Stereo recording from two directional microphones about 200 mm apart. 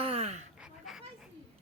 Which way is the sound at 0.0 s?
30° right (ahead or behind).